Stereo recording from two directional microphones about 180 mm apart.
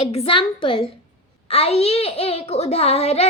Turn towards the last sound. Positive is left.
turn(degrees=35)  # may be behind; listen again after turning